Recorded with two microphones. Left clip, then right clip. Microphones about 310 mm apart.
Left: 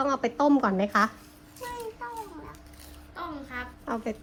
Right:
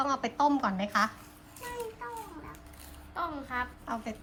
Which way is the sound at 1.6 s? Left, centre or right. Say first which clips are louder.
Left 3 dB; centre.